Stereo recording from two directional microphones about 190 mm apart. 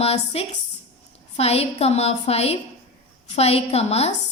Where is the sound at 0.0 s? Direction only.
30° left (ahead or behind).